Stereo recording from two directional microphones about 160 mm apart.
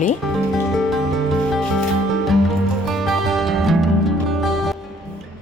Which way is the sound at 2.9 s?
Centre (ahead or behind).